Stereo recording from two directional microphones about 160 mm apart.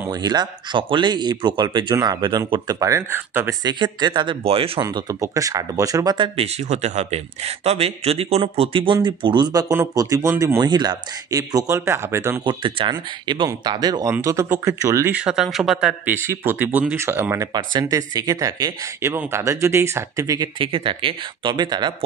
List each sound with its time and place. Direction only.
0.0 s speech: 25° right (ahead or behind)
3.6 s speech: 25° right (ahead or behind)
4.8 s speech: 20° right (ahead or behind)
12.4 s speech: 30° right (ahead or behind); by 15.9 s centre (ahead or behind)
16.1 s speech: 15° right (ahead or behind)